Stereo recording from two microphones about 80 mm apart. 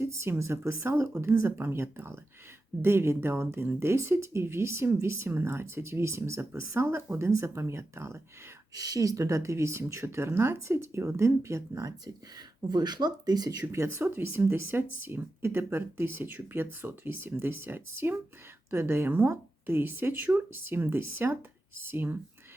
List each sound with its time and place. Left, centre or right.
0.0 s speech: right
8.7 s speech: right
12.6 s speech: right
13.7 s speech: right